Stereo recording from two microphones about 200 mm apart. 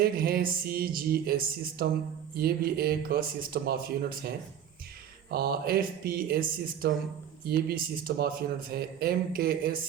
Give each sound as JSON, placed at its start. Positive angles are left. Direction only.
{"t": 0.0, "sound": "speech", "side_deg": -50}
{"t": 5.3, "sound": "speech", "side_deg": -50}